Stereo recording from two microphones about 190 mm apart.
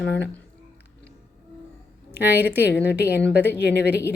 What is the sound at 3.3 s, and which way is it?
Speech, 60° left (ahead or behind).